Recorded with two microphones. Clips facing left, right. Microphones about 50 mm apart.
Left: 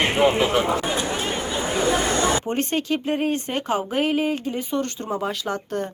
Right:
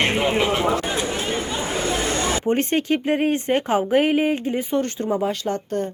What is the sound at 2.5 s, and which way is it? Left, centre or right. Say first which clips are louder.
Speech: right 3 dB; right.